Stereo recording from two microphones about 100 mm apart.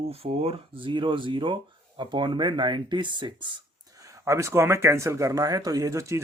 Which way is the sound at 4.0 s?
30° right (ahead or behind).